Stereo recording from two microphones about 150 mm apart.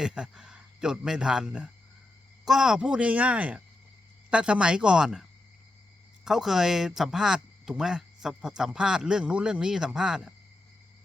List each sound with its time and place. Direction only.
0.0 s a man's voice: 5° right (ahead or behind)
6.2 s speech: centre (ahead or behind)